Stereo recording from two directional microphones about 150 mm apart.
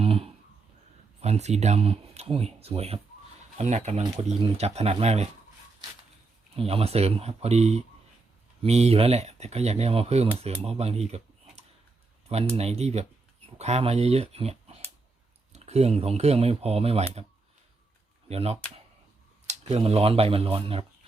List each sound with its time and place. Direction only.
0.0 s a sound: 40° right (ahead or behind)
1.2 s speech: 45° right (ahead or behind)
6.6 s speech: 40° right (ahead or behind)
12.5 s speech: 45° right (ahead or behind)
18.3 s speech: 45° right (ahead or behind)